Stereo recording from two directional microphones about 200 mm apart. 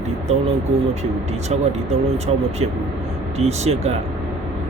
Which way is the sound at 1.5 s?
30° right (ahead or behind).